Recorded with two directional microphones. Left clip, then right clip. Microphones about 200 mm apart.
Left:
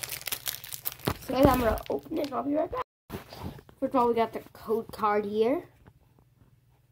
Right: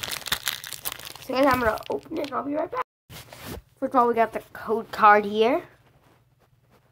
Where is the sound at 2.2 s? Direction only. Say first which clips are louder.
Right 1 dB; 5° right (ahead or behind).